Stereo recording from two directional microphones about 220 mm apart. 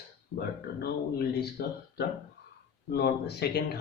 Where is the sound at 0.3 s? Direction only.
45° left (ahead or behind).